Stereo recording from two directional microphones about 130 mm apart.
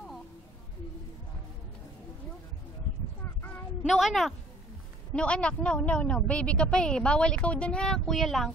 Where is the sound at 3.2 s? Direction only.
15° left (ahead or behind).